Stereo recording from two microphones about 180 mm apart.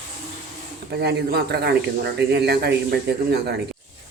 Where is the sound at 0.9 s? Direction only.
65° right (ahead or behind).